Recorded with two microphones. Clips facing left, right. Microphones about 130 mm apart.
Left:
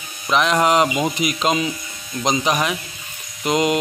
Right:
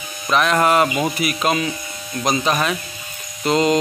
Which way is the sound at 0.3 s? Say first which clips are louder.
Even; 15° left (ahead or behind).